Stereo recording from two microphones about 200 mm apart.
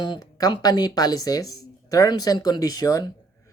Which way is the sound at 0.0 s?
20° left (ahead or behind).